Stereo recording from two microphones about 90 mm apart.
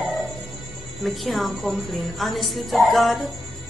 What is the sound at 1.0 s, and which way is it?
A woman's voice, centre (ahead or behind).